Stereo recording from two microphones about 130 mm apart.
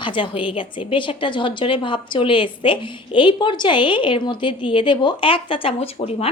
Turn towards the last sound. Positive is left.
turn(degrees=50)  # may be behind; listen again after turning